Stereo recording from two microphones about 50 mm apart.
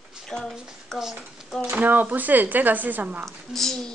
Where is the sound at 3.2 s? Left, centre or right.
Centre.